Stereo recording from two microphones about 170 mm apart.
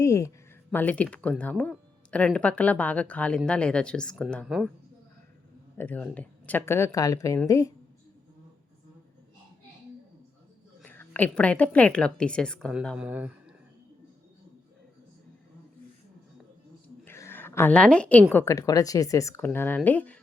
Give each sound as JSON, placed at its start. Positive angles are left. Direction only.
{"t": 0.0, "sound": "speech", "side_deg": 20}
{"t": 5.7, "sound": "speech", "side_deg": 10}
{"t": 10.8, "sound": "a woman's voice", "side_deg": 10}
{"t": 17.1, "sound": "a woman's voice", "side_deg": 15}